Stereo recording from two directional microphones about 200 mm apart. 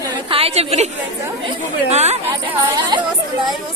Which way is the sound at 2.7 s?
20° right (ahead or behind).